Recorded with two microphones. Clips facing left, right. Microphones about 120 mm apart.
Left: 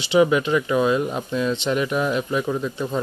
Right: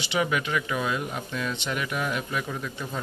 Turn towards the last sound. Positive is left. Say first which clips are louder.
# left 9 dB
turn(degrees=25)  # may be behind; listen again after turning